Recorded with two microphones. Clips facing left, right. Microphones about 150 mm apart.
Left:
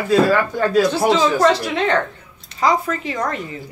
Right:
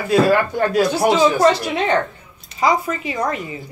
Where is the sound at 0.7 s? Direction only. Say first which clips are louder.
Left 1 dB; 15° right (ahead or behind).